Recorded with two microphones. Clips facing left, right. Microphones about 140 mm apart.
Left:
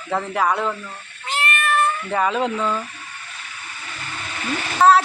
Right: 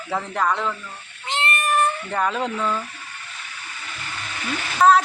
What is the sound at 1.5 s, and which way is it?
Meow, 40° right (ahead or behind).